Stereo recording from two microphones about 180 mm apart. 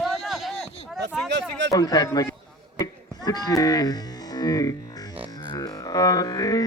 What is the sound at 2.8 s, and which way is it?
Music, 20° left (ahead or behind).